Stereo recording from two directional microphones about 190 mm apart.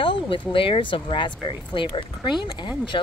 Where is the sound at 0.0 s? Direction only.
25° left (ahead or behind).